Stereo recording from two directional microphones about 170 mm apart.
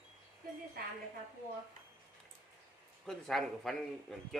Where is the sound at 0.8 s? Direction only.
65° right (ahead or behind).